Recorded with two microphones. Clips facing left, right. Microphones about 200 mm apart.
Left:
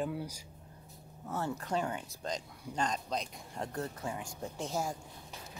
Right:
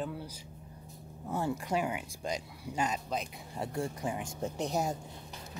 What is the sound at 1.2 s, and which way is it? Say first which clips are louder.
Speech: right 3 dB; 10° right (ahead or behind).